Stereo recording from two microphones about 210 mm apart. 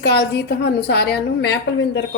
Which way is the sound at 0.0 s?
50° left (ahead or behind).